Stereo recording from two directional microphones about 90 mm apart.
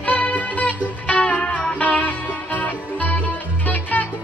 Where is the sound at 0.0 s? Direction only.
15° left (ahead or behind).